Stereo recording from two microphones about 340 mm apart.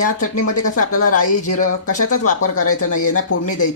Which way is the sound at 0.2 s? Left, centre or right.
Left.